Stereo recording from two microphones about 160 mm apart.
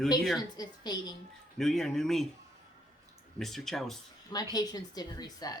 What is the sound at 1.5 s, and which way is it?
Speech, 5° left (ahead or behind).